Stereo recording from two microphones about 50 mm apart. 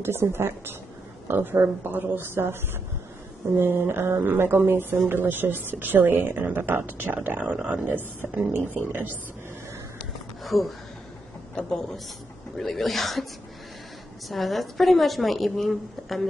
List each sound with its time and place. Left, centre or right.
0.0 s a woman's voice: right
3.5 s a woman's voice: right
7.3 s speech: right
10.4 s a woman's voice: centre
14.3 s a woman's voice: centre